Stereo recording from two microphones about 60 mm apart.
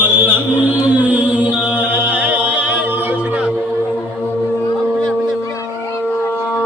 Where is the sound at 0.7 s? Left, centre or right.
Right.